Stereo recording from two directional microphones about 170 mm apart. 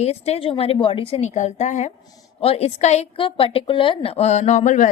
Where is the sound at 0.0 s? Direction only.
40° left (ahead or behind).